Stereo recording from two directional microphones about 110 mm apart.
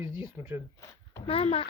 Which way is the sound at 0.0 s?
45° left (ahead or behind).